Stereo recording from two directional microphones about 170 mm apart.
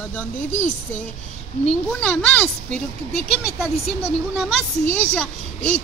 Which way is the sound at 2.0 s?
5° left (ahead or behind).